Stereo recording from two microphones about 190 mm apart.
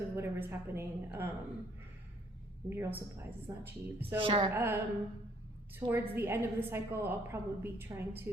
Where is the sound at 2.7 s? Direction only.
10° right (ahead or behind).